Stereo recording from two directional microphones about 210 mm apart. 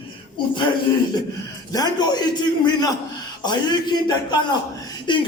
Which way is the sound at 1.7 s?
20° left (ahead or behind).